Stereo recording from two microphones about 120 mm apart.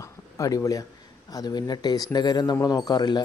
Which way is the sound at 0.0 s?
25° left (ahead or behind).